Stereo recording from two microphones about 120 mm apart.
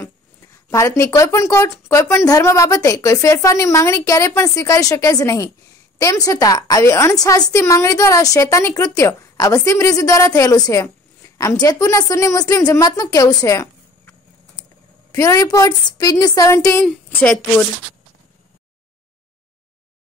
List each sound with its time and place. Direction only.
0.7 s a woman's voice: 25° left (ahead or behind)
15.1 s a woman's voice: 30° left (ahead or behind)
16.8 s a woman's voice: 10° left (ahead or behind)